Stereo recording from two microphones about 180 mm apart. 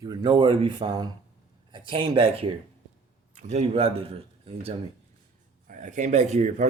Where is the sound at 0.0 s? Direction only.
20° right (ahead or behind).